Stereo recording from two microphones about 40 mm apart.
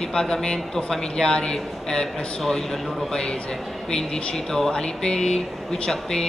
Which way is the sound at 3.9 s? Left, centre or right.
Centre.